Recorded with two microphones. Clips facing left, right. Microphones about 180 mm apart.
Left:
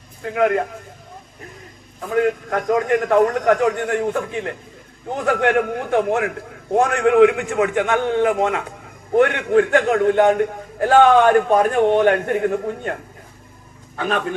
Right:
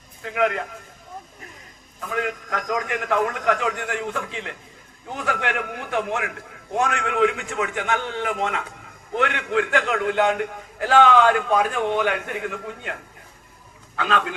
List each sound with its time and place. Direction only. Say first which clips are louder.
0.3 s a man's voice: left 5 dB; 45° left (ahead or behind)
2.0 s a man's voice: left 9 dB; 40° left (ahead or behind)